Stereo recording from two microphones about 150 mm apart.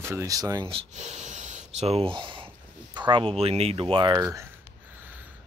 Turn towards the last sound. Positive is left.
turn(degrees=-35)  # may be behind; listen again after turning